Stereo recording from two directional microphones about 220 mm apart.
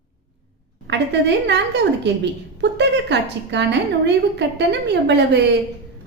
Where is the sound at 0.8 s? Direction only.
50° right (ahead or behind).